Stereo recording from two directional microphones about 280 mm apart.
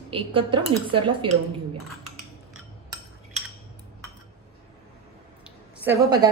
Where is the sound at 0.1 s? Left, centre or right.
Centre.